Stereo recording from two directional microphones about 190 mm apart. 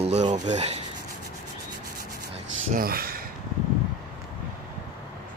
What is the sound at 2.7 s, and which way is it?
Speech, 50° right (ahead or behind).